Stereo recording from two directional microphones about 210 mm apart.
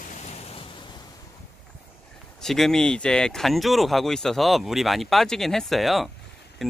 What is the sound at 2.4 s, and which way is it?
Speech, centre (ahead or behind).